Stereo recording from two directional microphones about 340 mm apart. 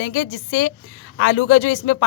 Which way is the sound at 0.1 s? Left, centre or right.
Left.